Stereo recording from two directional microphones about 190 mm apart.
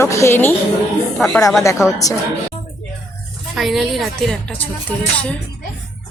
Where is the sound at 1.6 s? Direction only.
15° left (ahead or behind).